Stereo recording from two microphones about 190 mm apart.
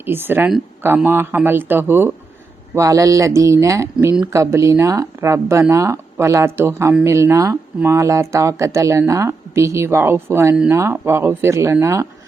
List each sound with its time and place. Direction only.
0.0 s speech: 10° right (ahead or behind)